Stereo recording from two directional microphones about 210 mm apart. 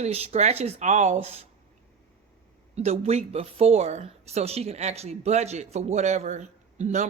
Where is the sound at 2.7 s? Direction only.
30° right (ahead or behind).